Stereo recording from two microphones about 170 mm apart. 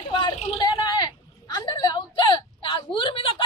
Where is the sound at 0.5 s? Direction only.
25° left (ahead or behind).